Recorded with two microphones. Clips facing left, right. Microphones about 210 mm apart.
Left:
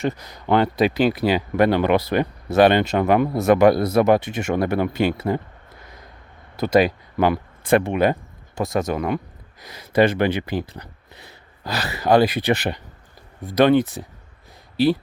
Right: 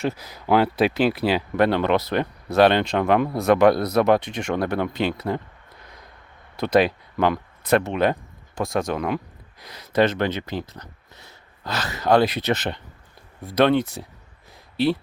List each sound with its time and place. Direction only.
0.0 s speech: 5° right (ahead or behind)
6.6 s speech: centre (ahead or behind)